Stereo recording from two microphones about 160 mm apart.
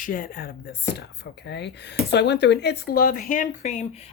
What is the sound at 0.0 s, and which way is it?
Speech, 60° left (ahead or behind).